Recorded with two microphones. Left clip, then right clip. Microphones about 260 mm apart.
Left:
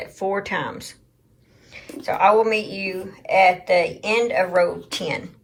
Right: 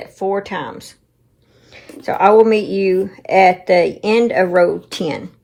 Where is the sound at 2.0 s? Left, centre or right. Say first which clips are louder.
Right 6 dB; centre.